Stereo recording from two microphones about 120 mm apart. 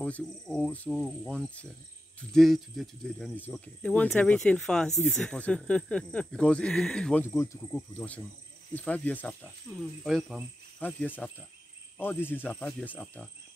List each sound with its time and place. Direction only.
0.0 s speech: 10° left (ahead or behind)
7.2 s speech: 25° left (ahead or behind)
7.7 s speech: 10° left (ahead or behind)
10.0 s speech: centre (ahead or behind)
10.8 s speech: 10° left (ahead or behind)